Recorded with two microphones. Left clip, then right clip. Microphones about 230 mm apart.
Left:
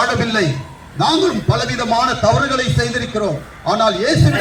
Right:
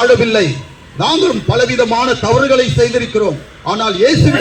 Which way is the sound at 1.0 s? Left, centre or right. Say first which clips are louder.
Right 2 dB; centre.